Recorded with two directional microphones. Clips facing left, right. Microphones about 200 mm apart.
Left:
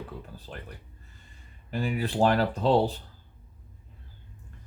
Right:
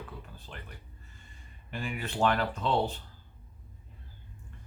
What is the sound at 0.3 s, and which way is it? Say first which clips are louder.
Speech: left 5 dB; 35° left (ahead or behind).